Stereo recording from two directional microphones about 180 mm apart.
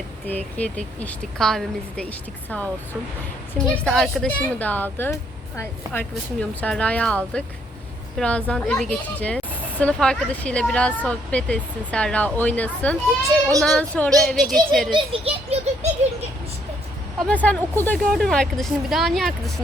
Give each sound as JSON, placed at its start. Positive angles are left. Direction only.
{"t": 0.3, "sound": "speech", "side_deg": 10}
{"t": 3.8, "sound": "speech", "side_deg": 0}
{"t": 14.9, "sound": "a child's voice", "side_deg": -30}
{"t": 17.2, "sound": "speech", "side_deg": 5}